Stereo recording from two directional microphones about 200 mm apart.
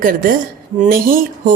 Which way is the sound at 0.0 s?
45° right (ahead or behind).